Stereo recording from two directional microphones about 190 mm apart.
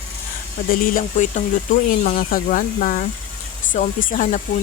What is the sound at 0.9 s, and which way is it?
Speech, 40° left (ahead or behind).